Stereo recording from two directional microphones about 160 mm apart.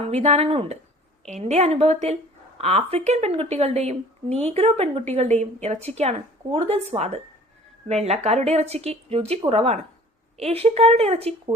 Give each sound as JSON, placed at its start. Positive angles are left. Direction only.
{"t": 0.0, "sound": "a woman's voice", "side_deg": -40}